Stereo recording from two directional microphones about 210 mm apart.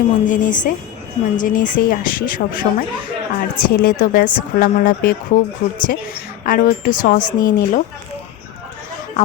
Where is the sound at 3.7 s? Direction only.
45° left (ahead or behind).